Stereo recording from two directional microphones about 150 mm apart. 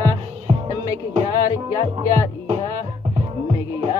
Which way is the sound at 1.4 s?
20° left (ahead or behind).